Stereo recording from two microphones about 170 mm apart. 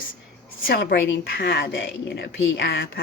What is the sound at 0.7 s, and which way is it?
A woman's voice, 70° left (ahead or behind).